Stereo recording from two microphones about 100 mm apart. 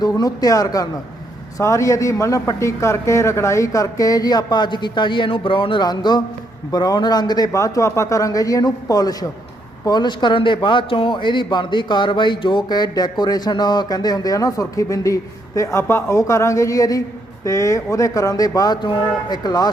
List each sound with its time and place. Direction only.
0.0 s a man's voice: 40° left (ahead or behind)